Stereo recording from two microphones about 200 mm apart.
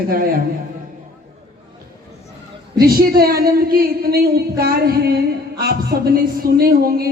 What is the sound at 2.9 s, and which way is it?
Speech, 50° right (ahead or behind).